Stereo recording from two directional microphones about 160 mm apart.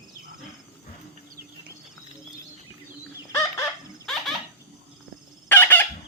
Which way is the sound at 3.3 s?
20° left (ahead or behind).